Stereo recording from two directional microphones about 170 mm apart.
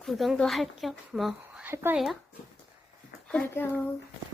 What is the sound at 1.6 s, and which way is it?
Speech, 10° right (ahead or behind).